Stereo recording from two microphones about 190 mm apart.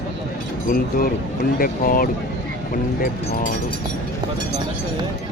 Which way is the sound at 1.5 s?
50° left (ahead or behind).